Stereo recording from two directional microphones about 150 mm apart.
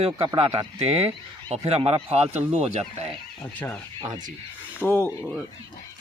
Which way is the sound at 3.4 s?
15° left (ahead or behind).